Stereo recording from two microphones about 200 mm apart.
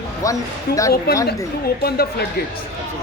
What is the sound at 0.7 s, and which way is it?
A man's voice, 55° left (ahead or behind).